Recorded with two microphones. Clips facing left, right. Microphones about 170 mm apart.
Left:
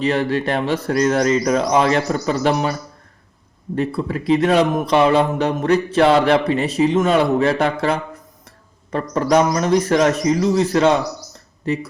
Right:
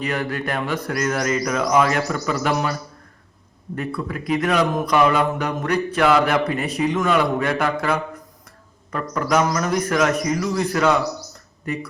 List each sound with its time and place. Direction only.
0.0 s speech: 30° left (ahead or behind)
3.8 s speech: 30° left (ahead or behind)